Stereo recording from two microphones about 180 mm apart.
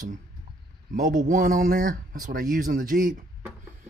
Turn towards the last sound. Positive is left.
turn(degrees=-50)  # may be behind; listen again after turning